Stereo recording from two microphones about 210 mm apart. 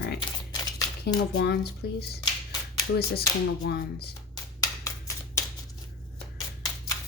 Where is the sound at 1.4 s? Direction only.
50° left (ahead or behind).